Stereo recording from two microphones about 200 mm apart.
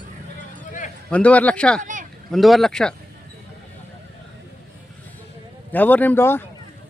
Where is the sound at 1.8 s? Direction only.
40° right (ahead or behind).